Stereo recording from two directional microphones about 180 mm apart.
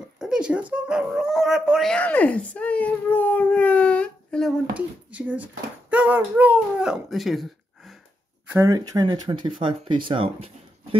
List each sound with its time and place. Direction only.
0.2 s speech: 5° right (ahead or behind)
8.5 s speech: 15° right (ahead or behind)